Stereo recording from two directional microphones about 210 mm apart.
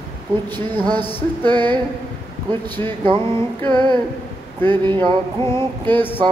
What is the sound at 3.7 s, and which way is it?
Mantra, 20° right (ahead or behind).